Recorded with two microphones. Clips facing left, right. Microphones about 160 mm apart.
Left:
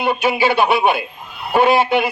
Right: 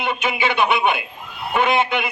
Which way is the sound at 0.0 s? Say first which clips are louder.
Left 5 dB; 35° left (ahead or behind).